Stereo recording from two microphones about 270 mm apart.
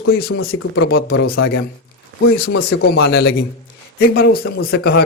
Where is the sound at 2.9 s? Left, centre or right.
Left.